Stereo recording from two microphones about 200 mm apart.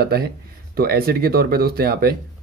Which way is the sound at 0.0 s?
50° right (ahead or behind).